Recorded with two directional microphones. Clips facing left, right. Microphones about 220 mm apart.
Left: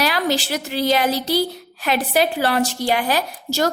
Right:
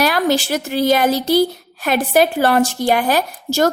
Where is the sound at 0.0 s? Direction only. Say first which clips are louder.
Right 4 dB; 50° right (ahead or behind).